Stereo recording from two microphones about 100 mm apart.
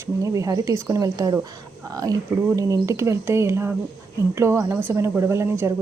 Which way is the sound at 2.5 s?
35° right (ahead or behind).